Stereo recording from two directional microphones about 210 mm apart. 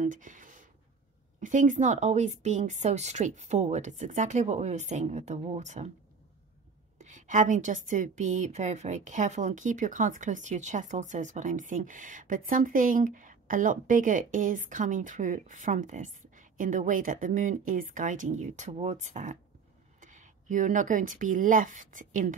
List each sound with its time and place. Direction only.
0.0 s a sound: 35° right (ahead or behind)
1.4 s a woman's voice: 35° right (ahead or behind)
7.0 s a woman's voice: 35° right (ahead or behind)